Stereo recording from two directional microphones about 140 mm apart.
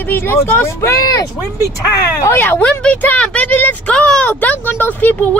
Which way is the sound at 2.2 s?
15° left (ahead or behind).